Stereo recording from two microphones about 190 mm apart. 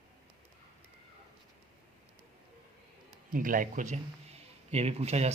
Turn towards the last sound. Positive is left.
turn(degrees=-35)  # may be behind; listen again after turning